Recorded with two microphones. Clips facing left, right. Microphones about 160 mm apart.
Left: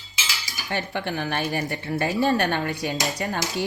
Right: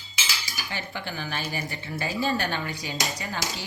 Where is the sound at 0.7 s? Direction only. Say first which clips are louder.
Left 8 dB; 65° left (ahead or behind).